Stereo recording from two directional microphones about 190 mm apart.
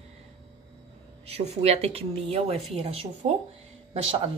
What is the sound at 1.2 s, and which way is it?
Speech, 35° right (ahead or behind).